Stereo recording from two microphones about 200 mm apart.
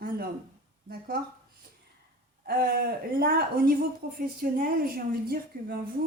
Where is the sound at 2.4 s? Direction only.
50° right (ahead or behind).